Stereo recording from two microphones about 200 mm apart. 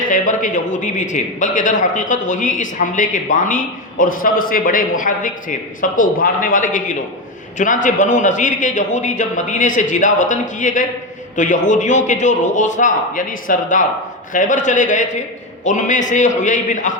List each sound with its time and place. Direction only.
0.0 s a man's voice: 40° left (ahead or behind)